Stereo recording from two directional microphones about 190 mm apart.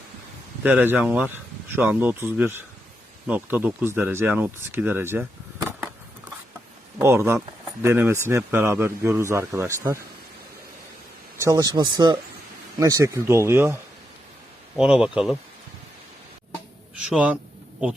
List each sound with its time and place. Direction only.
0.6 s speech: 10° right (ahead or behind)
7.0 s speech: 15° right (ahead or behind)
11.3 s speech: 20° right (ahead or behind)
14.8 s speech: 5° right (ahead or behind)
17.0 s a man's voice: 5° right (ahead or behind)